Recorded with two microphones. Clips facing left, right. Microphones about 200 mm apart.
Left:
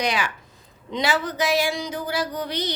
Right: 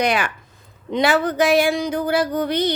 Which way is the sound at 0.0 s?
55° right (ahead or behind).